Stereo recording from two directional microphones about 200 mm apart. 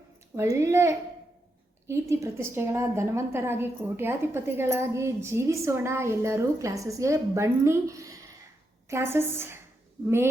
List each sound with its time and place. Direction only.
0.3 s a woman's voice: 15° right (ahead or behind)